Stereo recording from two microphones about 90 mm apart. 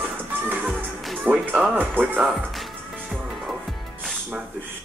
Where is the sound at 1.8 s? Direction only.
20° right (ahead or behind).